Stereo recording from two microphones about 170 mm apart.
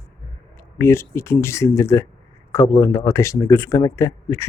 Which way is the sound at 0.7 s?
15° left (ahead or behind).